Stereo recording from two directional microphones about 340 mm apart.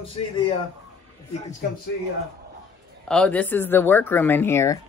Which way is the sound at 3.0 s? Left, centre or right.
Centre.